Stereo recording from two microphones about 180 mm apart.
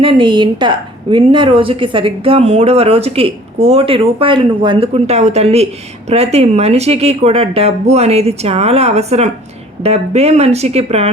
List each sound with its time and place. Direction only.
0.0 s a woman's voice: 30° right (ahead or behind)